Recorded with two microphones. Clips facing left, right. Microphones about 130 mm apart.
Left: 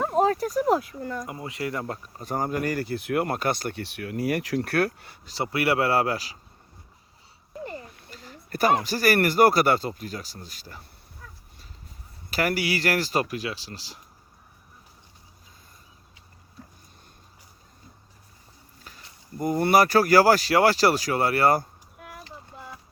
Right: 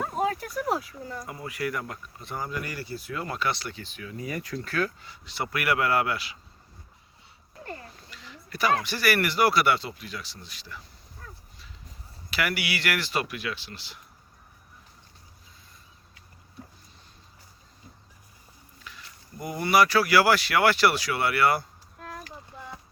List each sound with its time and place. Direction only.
0.3 s speech: 40° left (ahead or behind)
0.8 s speech: 60° left (ahead or behind)
1.3 s speech: 25° left (ahead or behind); by 5.3 s 55° left (ahead or behind)
5.3 s speech: 30° left (ahead or behind)
7.9 s a sound: 50° left (ahead or behind)
8.8 s speech: 40° left (ahead or behind)
12.3 s speech: 40° left (ahead or behind)
18.9 s a sound: 40° left (ahead or behind)
19.4 s speech: 45° left (ahead or behind)